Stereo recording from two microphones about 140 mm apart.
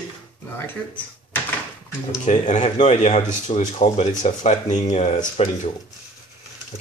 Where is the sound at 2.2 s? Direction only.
60° left (ahead or behind).